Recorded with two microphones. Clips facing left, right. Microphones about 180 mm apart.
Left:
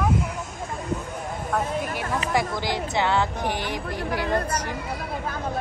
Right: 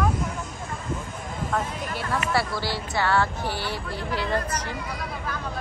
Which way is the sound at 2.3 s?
15° left (ahead or behind).